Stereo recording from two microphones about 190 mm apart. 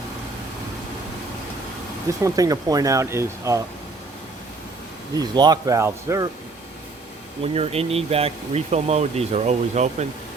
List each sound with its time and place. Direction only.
2.2 s speech: 20° right (ahead or behind)
5.1 s speech: 20° right (ahead or behind)
7.4 s speech: 30° right (ahead or behind)